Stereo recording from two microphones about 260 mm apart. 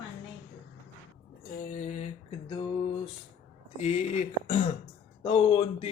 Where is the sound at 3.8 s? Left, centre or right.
Left.